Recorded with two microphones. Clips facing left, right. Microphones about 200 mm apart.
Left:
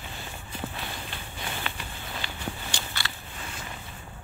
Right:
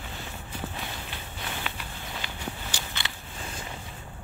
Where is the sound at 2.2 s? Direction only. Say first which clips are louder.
Left 2 dB; 15° right (ahead or behind).